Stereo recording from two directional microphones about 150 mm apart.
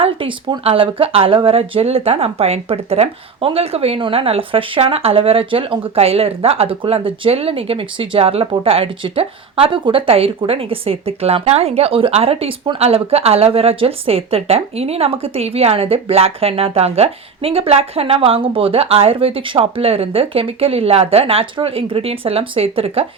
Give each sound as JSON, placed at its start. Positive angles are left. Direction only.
{"t": 0.0, "sound": "speech", "side_deg": -35}